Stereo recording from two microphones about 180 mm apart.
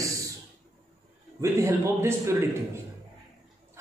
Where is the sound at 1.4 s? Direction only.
15° right (ahead or behind).